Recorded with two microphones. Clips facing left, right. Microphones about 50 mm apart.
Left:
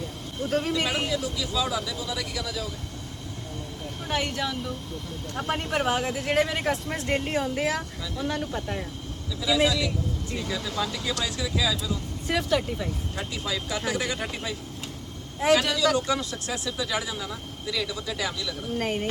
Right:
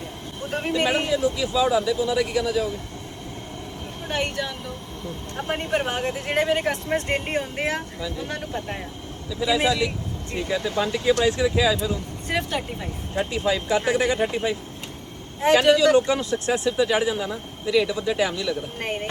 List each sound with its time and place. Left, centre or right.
0.5 s speech: right
4.1 s speech: right